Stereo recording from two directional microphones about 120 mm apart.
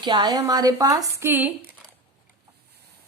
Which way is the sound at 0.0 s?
40° right (ahead or behind).